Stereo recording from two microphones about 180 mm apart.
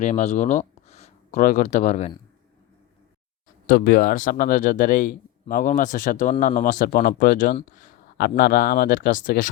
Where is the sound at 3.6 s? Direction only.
50° left (ahead or behind).